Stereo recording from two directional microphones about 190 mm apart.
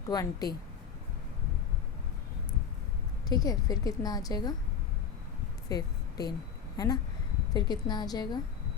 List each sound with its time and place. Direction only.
0.1 s a woman's voice: 20° left (ahead or behind)
3.2 s a woman's voice: 20° left (ahead or behind)
5.6 s a sound: 20° left (ahead or behind)
6.7 s a woman's voice: 20° left (ahead or behind)